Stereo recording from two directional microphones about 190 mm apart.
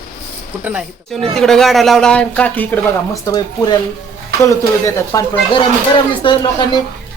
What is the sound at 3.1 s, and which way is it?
Speech, 20° left (ahead or behind).